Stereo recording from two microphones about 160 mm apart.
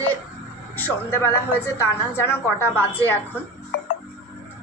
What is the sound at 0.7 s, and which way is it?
A woman's voice, 10° left (ahead or behind).